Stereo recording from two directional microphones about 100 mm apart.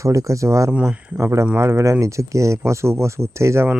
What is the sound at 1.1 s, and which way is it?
Speech, 30° right (ahead or behind).